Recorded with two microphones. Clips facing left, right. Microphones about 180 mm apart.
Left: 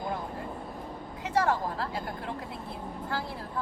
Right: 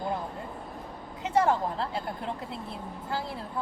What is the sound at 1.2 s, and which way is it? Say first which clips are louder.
Speech: right 2 dB; 25° right (ahead or behind).